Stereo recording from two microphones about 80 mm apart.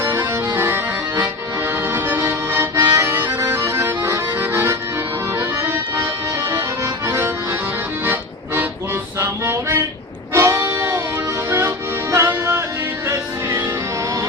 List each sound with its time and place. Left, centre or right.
0.0 s accordion: right
9.1 s music: right
12.1 s music: right